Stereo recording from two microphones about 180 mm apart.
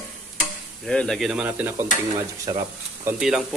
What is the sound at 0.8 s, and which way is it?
Speech, 5° left (ahead or behind).